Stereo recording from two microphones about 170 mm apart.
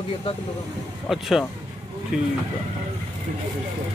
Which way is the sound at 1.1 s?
Centre (ahead or behind).